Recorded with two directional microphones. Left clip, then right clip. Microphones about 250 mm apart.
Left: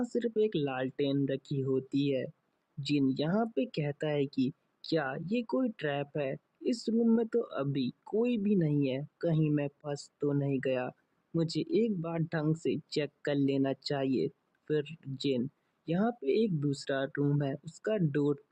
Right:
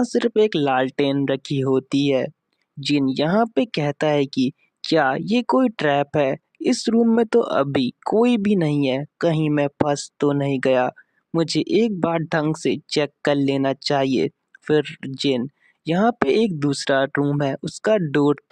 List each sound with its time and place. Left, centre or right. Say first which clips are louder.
0.0 s speech: right 12 dB; right